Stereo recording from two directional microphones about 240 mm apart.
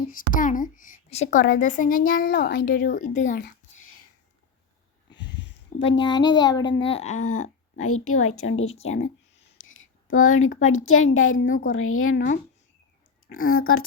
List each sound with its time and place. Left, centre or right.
0.1 s speech: left
5.1 s a sound: centre
5.4 s a sound: left
6.0 s a child's voice: centre
7.9 s a woman's voice: left
11.4 s speech: left
11.7 s a woman's voice: left
13.2 s speech: left
13.5 s a woman's voice: left